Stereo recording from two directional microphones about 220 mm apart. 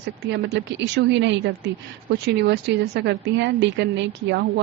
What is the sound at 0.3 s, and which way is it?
A woman's voice, 50° right (ahead or behind).